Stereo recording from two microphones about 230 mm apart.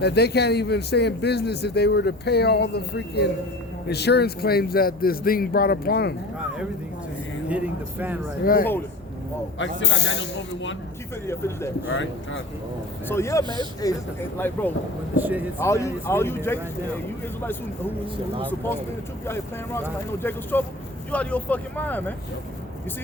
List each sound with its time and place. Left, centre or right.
0.0 s a man's voice: left
7.5 s speech: centre
8.4 s speech: left
9.6 s a man's voice: left
11.3 s speech: centre
11.9 s speech: left
13.1 s speech: centre
15.2 s speech: centre
15.5 s speech: centre
18.4 s speech: centre